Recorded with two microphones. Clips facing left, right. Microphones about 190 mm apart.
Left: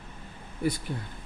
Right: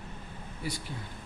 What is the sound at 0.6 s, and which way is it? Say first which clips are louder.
Speech: left 9 dB; 55° left (ahead or behind).